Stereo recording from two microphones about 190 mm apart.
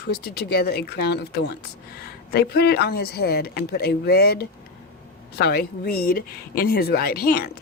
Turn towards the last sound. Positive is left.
turn(degrees=55)  # may be behind; listen again after turning